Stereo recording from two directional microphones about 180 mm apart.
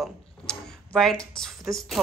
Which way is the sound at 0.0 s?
5° left (ahead or behind).